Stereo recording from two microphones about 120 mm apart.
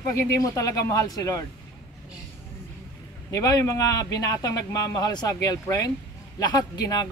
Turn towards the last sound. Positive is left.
turn(degrees=35)  # may be behind; listen again after turning